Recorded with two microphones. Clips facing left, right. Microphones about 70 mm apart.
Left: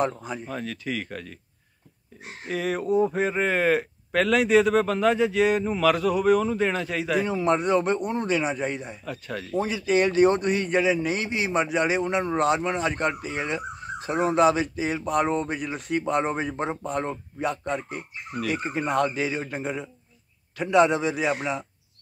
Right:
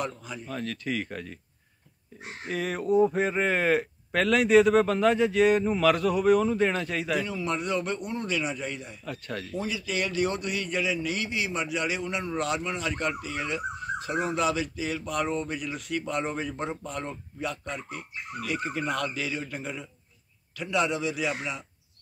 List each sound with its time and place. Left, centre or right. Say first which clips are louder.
0.0 s speech: left 7 dB; left
0.5 s speech: right 2 dB; centre
2.4 s speech: left 3 dB; centre
7.2 s a man's voice: left 7 dB; left
9.0 s speech: left 2 dB; centre
9.6 s a man's voice: left 9 dB; left